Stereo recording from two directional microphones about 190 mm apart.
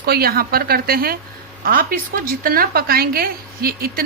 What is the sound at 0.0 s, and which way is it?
A woman's voice, 55° right (ahead or behind).